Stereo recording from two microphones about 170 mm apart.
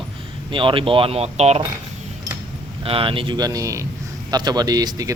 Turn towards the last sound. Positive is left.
turn(degrees=-20)  # may be behind; listen again after turning